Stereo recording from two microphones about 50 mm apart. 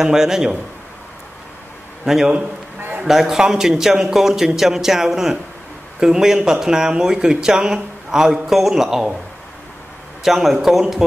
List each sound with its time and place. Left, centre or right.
0.0 s speech: centre
2.0 s speech: centre
10.2 s speech: centre